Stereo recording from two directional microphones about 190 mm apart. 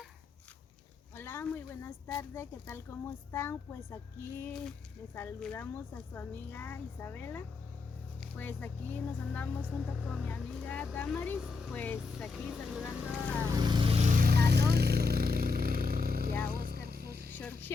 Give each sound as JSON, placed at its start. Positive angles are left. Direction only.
{"t": 1.1, "sound": "speech", "side_deg": 10}
{"t": 9.6, "sound": "speech", "side_deg": -5}
{"t": 10.2, "sound": "speech", "side_deg": 5}
{"t": 11.3, "sound": "speech", "side_deg": -5}
{"t": 11.7, "sound": "speech", "side_deg": 10}
{"t": 13.5, "sound": "speech", "side_deg": -20}
{"t": 14.1, "sound": "vehicle", "side_deg": -50}
{"t": 17.3, "sound": "speech", "side_deg": 10}